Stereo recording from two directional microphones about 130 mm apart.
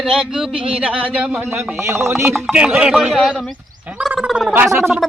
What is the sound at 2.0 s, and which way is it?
Speech, 15° right (ahead or behind).